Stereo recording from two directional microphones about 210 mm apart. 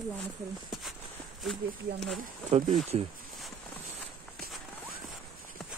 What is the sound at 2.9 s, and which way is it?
Speech, 30° right (ahead or behind).